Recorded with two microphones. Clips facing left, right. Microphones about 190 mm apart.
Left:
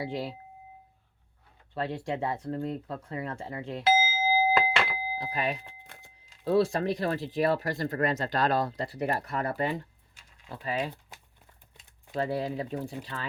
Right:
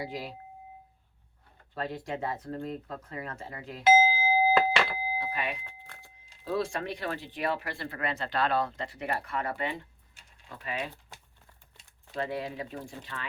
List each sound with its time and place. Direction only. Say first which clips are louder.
0.0 s speech: left 4 dB; 30° left (ahead or behind)
1.7 s speech: left 3 dB; 30° left (ahead or behind)
4.3 s a sound: right 1 dB; centre (ahead or behind)
5.1 s speech: left 5 dB; 40° left (ahead or behind)
5.8 s music: even; 20° left (ahead or behind)
6.4 s speech: left 6 dB; 35° left (ahead or behind)
12.1 s speech: left 4 dB; 35° left (ahead or behind)